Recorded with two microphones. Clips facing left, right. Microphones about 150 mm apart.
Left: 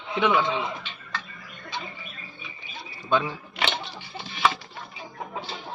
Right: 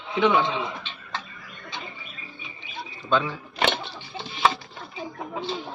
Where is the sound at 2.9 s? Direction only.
10° left (ahead or behind).